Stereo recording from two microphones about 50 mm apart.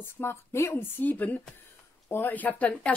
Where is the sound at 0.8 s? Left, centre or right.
Left.